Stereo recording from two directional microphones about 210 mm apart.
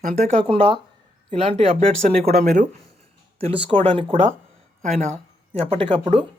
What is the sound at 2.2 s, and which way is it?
Speech, 40° right (ahead or behind).